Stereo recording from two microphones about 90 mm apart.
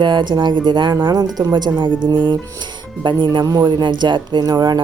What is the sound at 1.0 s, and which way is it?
Speech, 50° right (ahead or behind).